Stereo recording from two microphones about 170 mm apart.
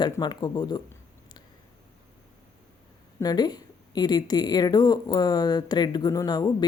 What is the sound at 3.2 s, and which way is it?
A woman's voice, 25° left (ahead or behind).